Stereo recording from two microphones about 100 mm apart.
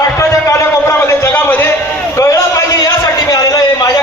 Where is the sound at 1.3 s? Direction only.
15° left (ahead or behind).